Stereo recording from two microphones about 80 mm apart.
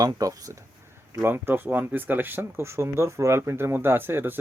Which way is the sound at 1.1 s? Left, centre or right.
Right.